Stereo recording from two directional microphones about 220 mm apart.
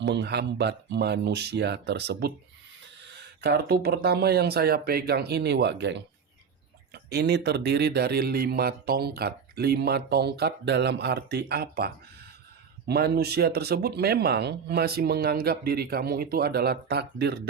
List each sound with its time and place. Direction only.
0.0 s speech: 50° right (ahead or behind)